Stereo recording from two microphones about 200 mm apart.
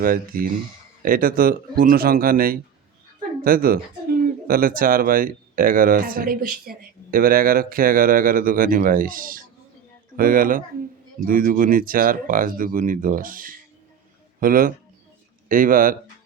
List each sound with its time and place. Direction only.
0.0 s speech: 45° right (ahead or behind)